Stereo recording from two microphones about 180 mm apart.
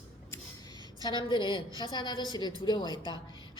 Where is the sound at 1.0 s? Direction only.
25° left (ahead or behind).